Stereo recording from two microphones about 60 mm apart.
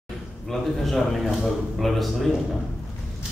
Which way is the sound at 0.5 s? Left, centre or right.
Centre.